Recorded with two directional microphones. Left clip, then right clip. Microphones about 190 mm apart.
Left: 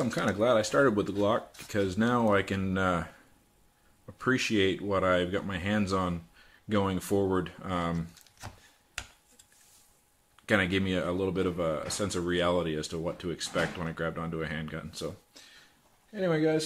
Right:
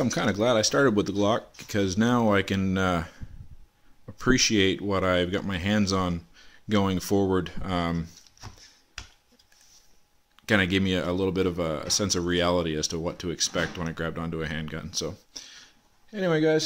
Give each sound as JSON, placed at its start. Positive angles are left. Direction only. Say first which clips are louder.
{"t": 0.0, "sound": "speech", "louder": "right 3 dB", "side_deg": -45}
{"t": 10.4, "sound": "speech", "louder": "right 3 dB", "side_deg": -40}